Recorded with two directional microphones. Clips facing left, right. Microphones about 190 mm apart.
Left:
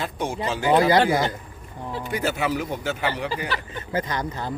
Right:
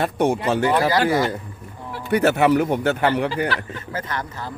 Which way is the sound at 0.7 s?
20° left (ahead or behind).